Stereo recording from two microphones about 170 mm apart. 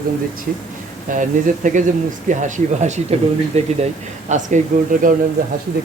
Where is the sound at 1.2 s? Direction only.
50° right (ahead or behind).